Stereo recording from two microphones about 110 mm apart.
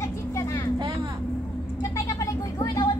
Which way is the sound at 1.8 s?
30° left (ahead or behind).